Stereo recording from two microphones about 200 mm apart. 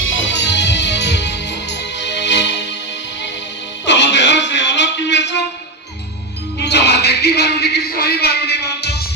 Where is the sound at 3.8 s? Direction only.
65° left (ahead or behind).